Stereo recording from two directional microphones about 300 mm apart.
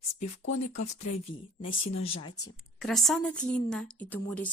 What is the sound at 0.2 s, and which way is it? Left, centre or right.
Speech, left.